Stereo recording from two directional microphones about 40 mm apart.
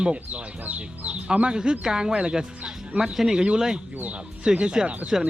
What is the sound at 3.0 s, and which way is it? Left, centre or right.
Speech, centre.